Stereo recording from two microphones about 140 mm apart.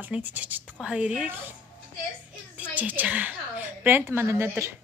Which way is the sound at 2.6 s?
10° right (ahead or behind).